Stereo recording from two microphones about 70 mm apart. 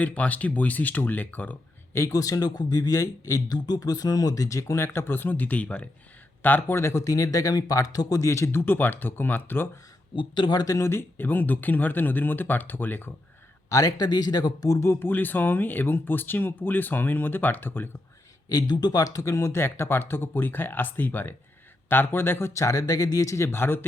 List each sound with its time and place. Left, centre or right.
0.0 s speech: left
1.9 s speech: left
2.1 s speech: left
4.8 s speech: left
6.9 s speech: left
8.3 s speech: left
10.7 s speech: left
13.7 s speech: left
14.8 s speech: left
18.4 s speech: left